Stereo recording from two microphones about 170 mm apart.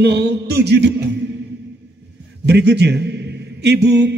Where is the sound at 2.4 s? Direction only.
85° right.